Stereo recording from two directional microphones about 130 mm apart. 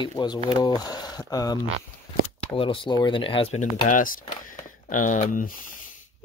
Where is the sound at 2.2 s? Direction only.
45° left (ahead or behind).